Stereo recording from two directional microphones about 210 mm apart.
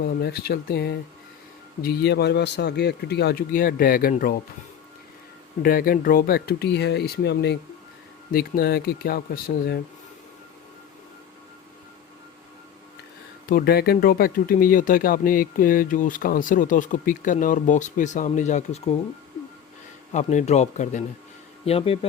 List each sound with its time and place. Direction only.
0.2 s a man's voice: 50° left (ahead or behind)
5.6 s a man's voice: 45° left (ahead or behind)
13.5 s speech: 45° left (ahead or behind)
20.1 s speech: 30° left (ahead or behind)